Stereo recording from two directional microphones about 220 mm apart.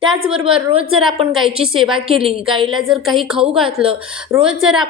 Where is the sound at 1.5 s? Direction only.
25° right (ahead or behind).